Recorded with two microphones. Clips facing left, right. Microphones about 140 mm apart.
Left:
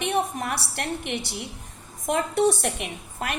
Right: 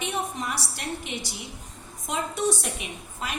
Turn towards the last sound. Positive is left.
turn(degrees=60)  # may be behind; listen again after turning